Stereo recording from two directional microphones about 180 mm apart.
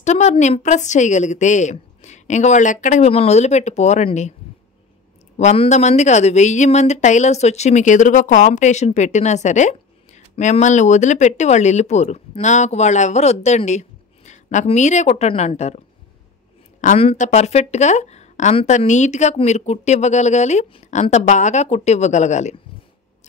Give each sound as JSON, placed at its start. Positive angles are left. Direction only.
{"t": 0.0, "sound": "speech", "side_deg": 40}
{"t": 5.4, "sound": "speech", "side_deg": 40}
{"t": 16.8, "sound": "speech", "side_deg": 35}